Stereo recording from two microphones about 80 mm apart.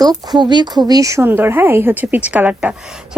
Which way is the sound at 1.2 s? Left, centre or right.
Right.